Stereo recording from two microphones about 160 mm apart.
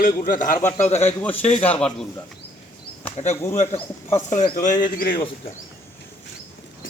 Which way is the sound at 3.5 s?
45° left (ahead or behind).